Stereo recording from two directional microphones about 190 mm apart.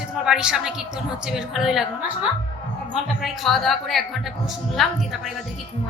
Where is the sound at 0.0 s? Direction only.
5° right (ahead or behind).